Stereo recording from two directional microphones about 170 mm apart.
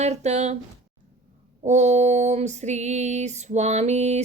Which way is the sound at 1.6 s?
45° right (ahead or behind).